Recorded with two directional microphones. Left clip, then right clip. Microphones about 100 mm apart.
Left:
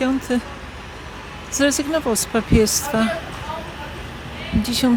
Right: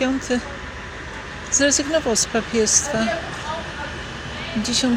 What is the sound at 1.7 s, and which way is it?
Speech, 85° left.